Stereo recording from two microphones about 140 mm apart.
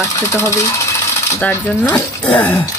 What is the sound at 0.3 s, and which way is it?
Speech, 20° left (ahead or behind).